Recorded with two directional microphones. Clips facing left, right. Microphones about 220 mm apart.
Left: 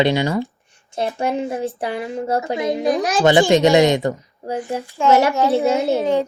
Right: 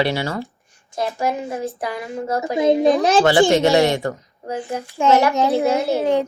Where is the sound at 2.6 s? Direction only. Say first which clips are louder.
Right 8 dB; 25° right (ahead or behind).